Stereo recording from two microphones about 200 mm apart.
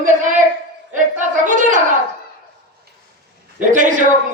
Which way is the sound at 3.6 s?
40° right (ahead or behind).